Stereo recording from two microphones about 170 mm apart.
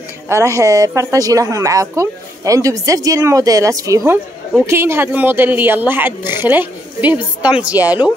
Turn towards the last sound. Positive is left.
turn(degrees=-10)  # may be behind; listen again after turning